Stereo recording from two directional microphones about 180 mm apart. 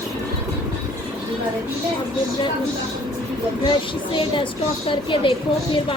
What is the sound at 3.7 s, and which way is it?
Speech, 25° left (ahead or behind).